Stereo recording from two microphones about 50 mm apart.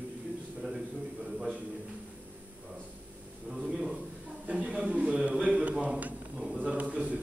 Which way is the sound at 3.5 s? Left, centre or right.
Centre.